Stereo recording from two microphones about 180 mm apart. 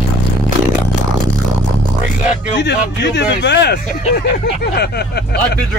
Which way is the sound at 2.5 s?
75° left (ahead or behind).